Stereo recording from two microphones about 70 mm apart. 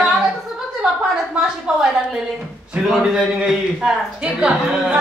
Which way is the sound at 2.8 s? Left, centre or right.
Centre.